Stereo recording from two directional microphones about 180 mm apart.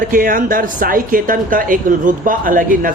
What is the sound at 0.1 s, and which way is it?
Speech, 50° right (ahead or behind).